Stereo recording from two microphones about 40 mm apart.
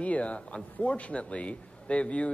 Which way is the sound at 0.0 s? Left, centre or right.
Left.